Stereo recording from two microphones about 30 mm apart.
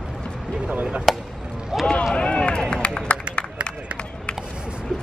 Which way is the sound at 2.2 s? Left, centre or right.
Left.